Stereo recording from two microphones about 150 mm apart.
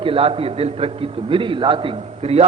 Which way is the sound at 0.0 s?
40° right (ahead or behind).